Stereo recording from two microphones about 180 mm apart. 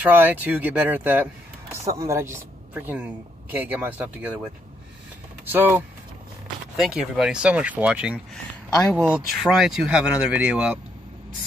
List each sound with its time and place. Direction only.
0.0 s speech: 10° right (ahead or behind)
5.4 s speech: 10° right (ahead or behind)
8.6 s speech: 20° left (ahead or behind)
8.9 s speech: 5° right (ahead or behind)